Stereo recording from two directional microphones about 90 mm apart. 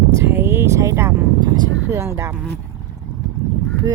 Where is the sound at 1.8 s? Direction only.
30° right (ahead or behind).